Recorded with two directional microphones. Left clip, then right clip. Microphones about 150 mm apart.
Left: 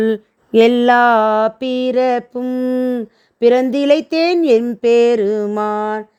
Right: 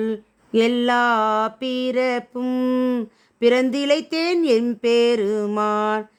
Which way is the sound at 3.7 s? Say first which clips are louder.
Left 7 dB; 40° left (ahead or behind).